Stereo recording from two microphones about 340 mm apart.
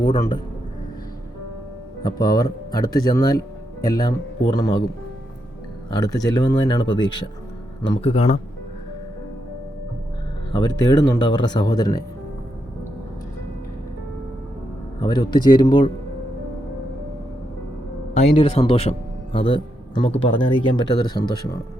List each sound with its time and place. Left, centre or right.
0.0 s speech: centre
2.0 s speech: centre
5.9 s speech: centre
10.5 s speech: centre
15.0 s speech: centre
18.1 s a man's voice: centre